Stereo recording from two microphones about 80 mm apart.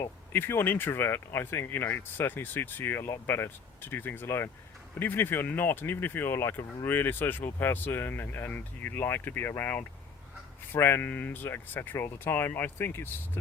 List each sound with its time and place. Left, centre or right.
0.3 s speech: left